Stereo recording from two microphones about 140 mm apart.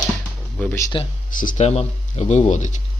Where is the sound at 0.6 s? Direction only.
10° left (ahead or behind).